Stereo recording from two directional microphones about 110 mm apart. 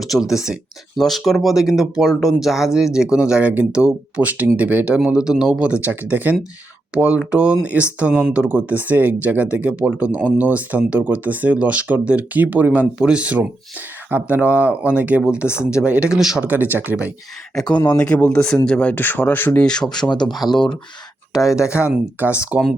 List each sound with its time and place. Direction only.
0.0 s speech: centre (ahead or behind)
16.5 s speech: 15° right (ahead or behind)
17.7 s speech: 45° left (ahead or behind)
17.9 s speech: 10° left (ahead or behind)
19.6 s speech: 5° left (ahead or behind); by 22.6 s 10° right (ahead or behind)